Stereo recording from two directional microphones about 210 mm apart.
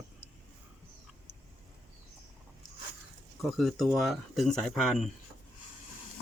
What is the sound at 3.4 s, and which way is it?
Speech, centre (ahead or behind).